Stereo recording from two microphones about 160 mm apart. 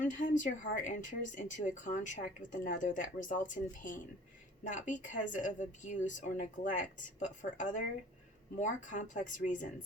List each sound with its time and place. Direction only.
0.0 s speech: 55° left (ahead or behind)